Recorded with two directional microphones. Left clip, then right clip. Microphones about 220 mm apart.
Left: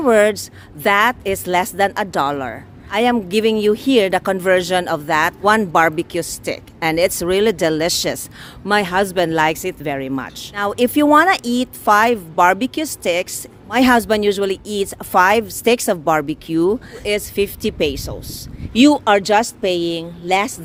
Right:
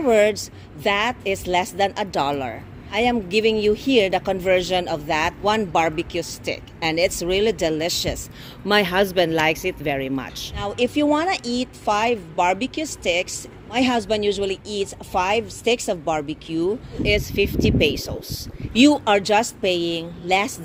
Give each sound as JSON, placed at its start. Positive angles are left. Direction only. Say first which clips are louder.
{"t": 0.0, "sound": "a woman's voice", "louder": "left 4 dB", "side_deg": 20}
{"t": 8.6, "sound": "speech", "louder": "left 2 dB", "side_deg": 5}
{"t": 10.5, "sound": "a woman's voice", "louder": "left 6 dB", "side_deg": 25}